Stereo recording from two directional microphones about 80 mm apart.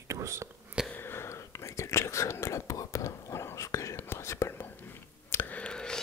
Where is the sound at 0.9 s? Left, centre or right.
Left.